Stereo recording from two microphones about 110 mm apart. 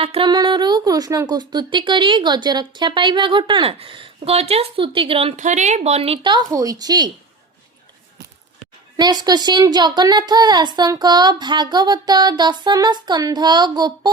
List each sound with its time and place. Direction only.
0.0 s music: 60° right (ahead or behind)
0.3 s speech: 40° right (ahead or behind); by 6.1 s 70° right (ahead or behind)
6.5 s speech: 30° right (ahead or behind)
9.0 s speech: 40° right (ahead or behind)